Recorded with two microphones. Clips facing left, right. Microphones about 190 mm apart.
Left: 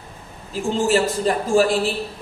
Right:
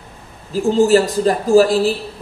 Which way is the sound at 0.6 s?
35° right (ahead or behind).